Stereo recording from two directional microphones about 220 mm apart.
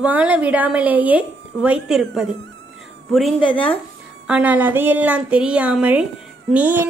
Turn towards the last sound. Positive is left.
turn(degrees=-10)  # may be behind; listen again after turning